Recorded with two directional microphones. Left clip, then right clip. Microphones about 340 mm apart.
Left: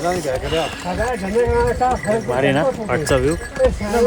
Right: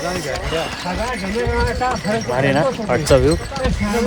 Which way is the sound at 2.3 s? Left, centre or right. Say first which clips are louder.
Right 2 dB; centre.